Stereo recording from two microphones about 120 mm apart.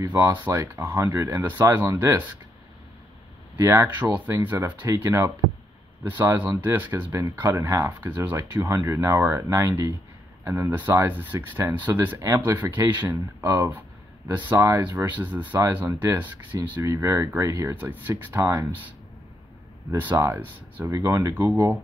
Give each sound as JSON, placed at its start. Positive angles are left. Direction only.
{"t": 0.2, "sound": "speech", "side_deg": -25}
{"t": 3.5, "sound": "speech", "side_deg": -25}
{"t": 20.0, "sound": "speech", "side_deg": -20}